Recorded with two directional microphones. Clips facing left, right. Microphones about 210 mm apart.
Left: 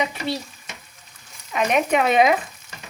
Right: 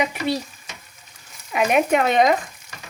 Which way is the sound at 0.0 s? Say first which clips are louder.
Right 3 dB; 10° right (ahead or behind).